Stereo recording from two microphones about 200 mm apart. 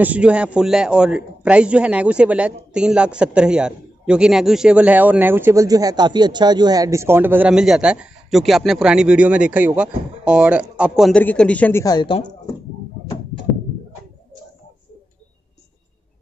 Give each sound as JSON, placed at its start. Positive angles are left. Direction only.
{"t": 0.0, "sound": "a man's voice", "side_deg": -5}
{"t": 11.8, "sound": "speech", "side_deg": 20}